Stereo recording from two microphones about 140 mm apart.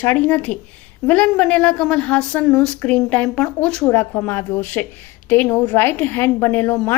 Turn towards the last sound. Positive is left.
turn(degrees=15)  # may be behind; listen again after turning